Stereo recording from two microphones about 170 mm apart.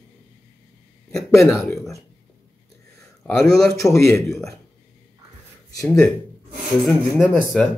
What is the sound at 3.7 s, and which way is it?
Speech, 15° left (ahead or behind).